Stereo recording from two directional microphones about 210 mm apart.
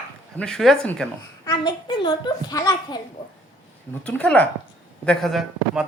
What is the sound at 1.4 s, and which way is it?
A child's voice, 20° left (ahead or behind).